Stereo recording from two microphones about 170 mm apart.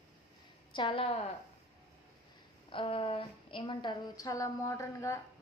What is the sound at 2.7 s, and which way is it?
Speech, 30° left (ahead or behind).